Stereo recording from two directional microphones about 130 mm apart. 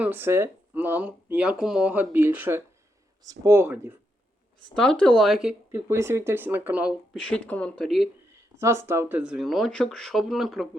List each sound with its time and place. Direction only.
0.0 s speech: 15° right (ahead or behind)
4.7 s speech: 5° left (ahead or behind)
5.7 s speech: 20° right (ahead or behind)
7.1 s speech: 5° left (ahead or behind)
7.9 s speech: centre (ahead or behind)
8.5 s speech: 20° right (ahead or behind); by 10.7 s centre (ahead or behind)